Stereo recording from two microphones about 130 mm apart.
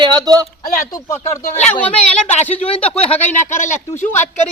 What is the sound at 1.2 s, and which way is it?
Speech, 60° left (ahead or behind).